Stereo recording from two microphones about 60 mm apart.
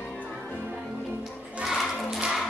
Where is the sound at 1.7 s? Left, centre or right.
Centre.